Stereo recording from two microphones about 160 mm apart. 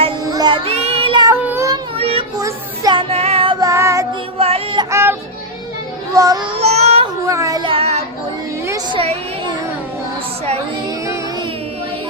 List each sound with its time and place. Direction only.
0.3 s child singing: 25° right (ahead or behind)
1.3 s child singing: 15° right (ahead or behind)
2.0 s child singing: 35° right (ahead or behind)
2.4 s child singing: 25° right (ahead or behind)
3.6 s child singing: 20° right (ahead or behind)
4.4 s music: 40° right (ahead or behind)
4.8 s music: 15° right (ahead or behind)
6.1 s child singing: 25° right (ahead or behind); by 7.1 s 40° right (ahead or behind)
7.3 s child singing: 20° right (ahead or behind); by 8.0 s 40° right (ahead or behind)
8.9 s speech: 35° right (ahead or behind)